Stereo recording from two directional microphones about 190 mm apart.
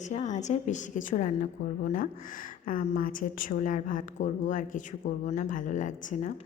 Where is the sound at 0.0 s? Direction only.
40° left (ahead or behind).